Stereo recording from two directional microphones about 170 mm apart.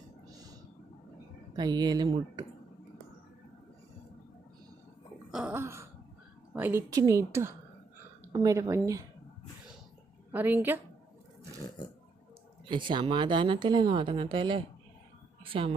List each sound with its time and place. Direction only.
1.5 s speech: 25° right (ahead or behind)
5.3 s laughter: 10° right (ahead or behind)
6.5 s a woman's voice: 10° right (ahead or behind)
10.3 s a woman's voice: 10° right (ahead or behind)
12.6 s a woman's voice: 30° right (ahead or behind)